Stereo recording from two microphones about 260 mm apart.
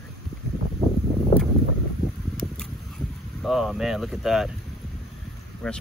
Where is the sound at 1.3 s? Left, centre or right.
Left.